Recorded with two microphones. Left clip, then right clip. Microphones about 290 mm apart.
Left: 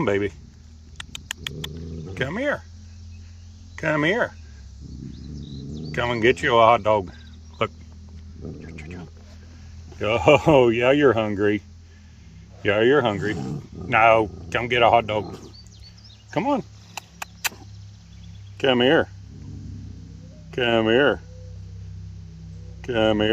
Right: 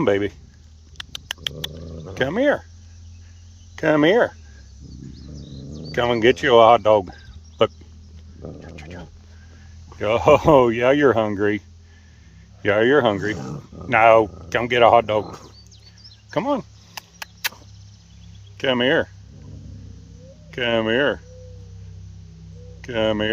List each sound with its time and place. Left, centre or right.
0.0 s speech: centre
0.9 s cat: centre
3.8 s speech: centre
5.9 s speech: centre
8.4 s a sound: centre
10.0 s speech: centre
12.6 s speech: centre
18.5 s speech: centre
20.5 s speech: centre
22.8 s speech: centre